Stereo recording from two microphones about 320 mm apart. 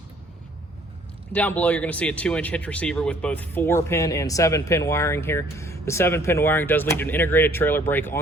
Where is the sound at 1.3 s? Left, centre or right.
Centre.